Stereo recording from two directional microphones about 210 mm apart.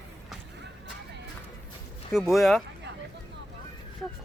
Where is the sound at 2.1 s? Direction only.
Centre (ahead or behind).